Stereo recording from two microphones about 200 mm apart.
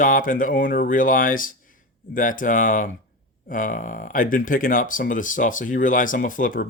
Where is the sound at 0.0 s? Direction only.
40° left (ahead or behind).